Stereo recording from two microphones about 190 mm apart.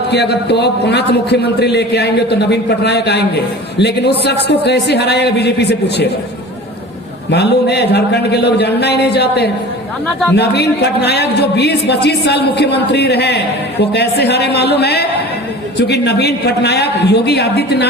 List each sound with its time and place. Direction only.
0.1 s a man's voice: 60° left (ahead or behind)
7.3 s a man's voice: 60° left (ahead or behind)